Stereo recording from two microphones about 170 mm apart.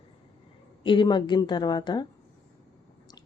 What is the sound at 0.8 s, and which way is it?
Speech, 25° left (ahead or behind).